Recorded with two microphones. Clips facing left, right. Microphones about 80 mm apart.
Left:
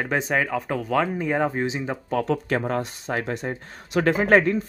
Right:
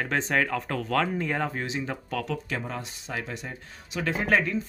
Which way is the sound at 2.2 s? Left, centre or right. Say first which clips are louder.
Left 8 dB; left.